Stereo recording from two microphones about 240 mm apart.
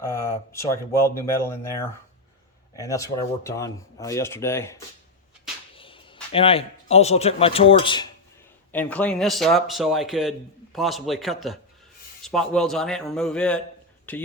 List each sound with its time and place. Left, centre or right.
0.0 s speech: centre
5.7 s a sound: left
6.3 s speech: left
8.7 s a man's voice: centre